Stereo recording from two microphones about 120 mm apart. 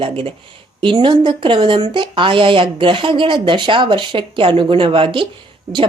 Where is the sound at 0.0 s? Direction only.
50° right (ahead or behind).